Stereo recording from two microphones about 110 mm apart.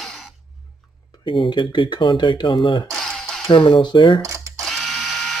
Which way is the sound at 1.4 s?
50° left (ahead or behind).